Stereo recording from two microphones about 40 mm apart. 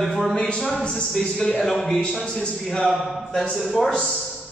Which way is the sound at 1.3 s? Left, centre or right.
Centre.